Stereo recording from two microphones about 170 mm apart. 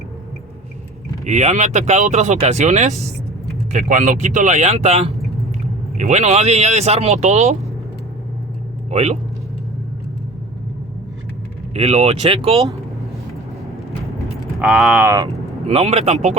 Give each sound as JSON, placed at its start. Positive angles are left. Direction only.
{"t": 1.2, "sound": "speech", "side_deg": -45}
{"t": 8.9, "sound": "speech", "side_deg": -40}
{"t": 11.7, "sound": "speech", "side_deg": -40}
{"t": 14.6, "sound": "speech", "side_deg": -5}
{"t": 15.6, "sound": "speech", "side_deg": -35}